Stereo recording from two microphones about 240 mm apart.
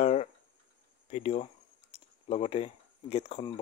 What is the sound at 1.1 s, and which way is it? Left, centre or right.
Speech, left.